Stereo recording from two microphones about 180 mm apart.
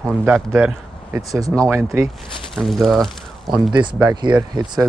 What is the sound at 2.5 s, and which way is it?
Speech, centre (ahead or behind).